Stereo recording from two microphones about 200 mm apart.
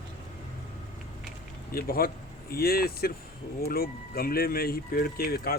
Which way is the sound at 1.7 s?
50° left (ahead or behind).